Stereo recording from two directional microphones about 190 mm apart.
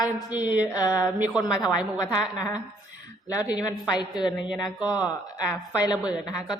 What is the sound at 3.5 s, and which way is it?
Speech, 20° left (ahead or behind).